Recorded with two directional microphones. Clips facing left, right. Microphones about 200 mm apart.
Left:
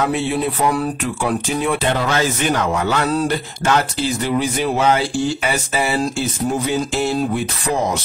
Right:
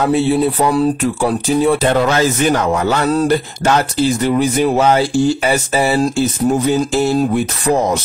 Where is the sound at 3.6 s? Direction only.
40° right (ahead or behind).